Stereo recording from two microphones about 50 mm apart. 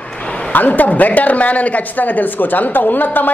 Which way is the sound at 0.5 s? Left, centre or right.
Left.